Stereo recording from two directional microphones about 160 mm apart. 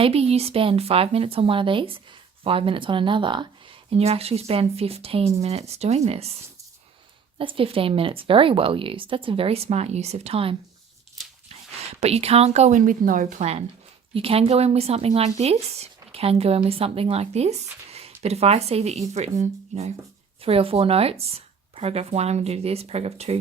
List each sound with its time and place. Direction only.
0.0 s speech: 40° right (ahead or behind)
7.3 s speech: 35° right (ahead or behind)
11.9 s speech: 40° right (ahead or behind)
14.1 s speech: 35° right (ahead or behind)